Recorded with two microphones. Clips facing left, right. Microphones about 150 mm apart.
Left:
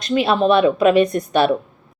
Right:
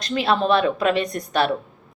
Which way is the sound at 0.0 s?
20° left (ahead or behind).